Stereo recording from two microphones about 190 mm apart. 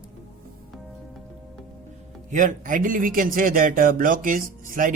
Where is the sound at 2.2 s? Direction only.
40° right (ahead or behind).